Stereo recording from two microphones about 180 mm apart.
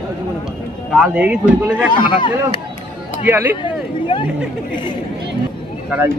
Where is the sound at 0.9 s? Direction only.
5° right (ahead or behind).